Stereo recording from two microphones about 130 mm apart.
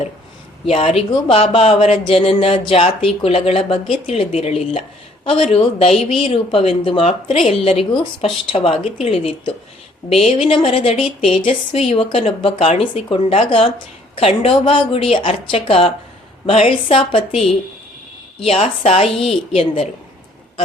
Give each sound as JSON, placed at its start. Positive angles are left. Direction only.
{"t": 0.6, "sound": "speech", "side_deg": 50}
{"t": 18.3, "sound": "speech", "side_deg": 45}